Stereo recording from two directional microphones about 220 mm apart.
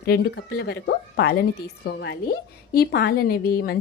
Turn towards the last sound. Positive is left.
turn(degrees=45)  # may be behind; listen again after turning